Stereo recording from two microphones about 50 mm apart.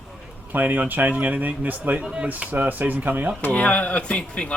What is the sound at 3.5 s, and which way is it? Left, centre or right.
Speech, left.